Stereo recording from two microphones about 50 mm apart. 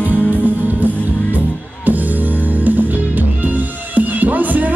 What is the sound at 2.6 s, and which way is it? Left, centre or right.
Music, right.